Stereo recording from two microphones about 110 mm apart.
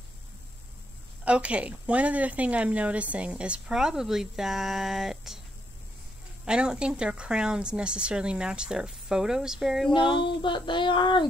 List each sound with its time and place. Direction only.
1.2 s a woman's voice: 10° right (ahead or behind)
6.4 s a woman's voice: 10° right (ahead or behind)
9.8 s a sound: 45° left (ahead or behind)